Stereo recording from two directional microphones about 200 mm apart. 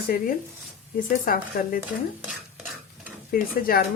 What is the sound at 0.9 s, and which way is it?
Speech, 45° left (ahead or behind).